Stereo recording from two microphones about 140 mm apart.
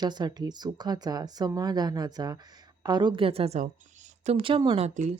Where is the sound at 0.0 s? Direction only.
30° right (ahead or behind); by 3.6 s 45° right (ahead or behind).